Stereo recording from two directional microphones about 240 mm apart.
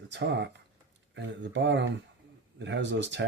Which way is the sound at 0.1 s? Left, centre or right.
Right.